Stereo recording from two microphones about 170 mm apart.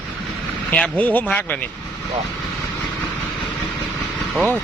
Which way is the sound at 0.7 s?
10° left (ahead or behind).